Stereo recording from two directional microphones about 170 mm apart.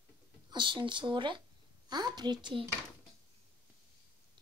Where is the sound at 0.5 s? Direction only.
30° right (ahead or behind).